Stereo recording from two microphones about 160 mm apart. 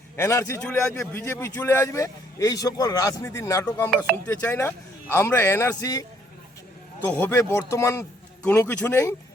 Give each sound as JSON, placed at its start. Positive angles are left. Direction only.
{"t": 0.2, "sound": "speech", "side_deg": 15}
{"t": 7.1, "sound": "speech", "side_deg": 15}